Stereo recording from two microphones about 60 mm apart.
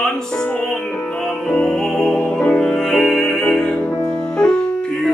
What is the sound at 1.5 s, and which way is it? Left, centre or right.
Music, centre.